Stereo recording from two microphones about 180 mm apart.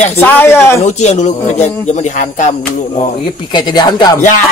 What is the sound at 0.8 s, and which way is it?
Speech, 40° left (ahead or behind).